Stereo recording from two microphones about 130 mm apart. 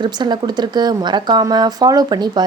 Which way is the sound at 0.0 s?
35° right (ahead or behind).